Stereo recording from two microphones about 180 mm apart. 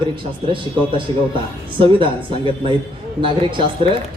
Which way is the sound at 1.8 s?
30° right (ahead or behind).